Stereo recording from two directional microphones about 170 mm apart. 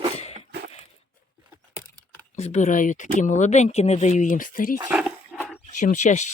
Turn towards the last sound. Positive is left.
turn(degrees=45)  # may be behind; listen again after turning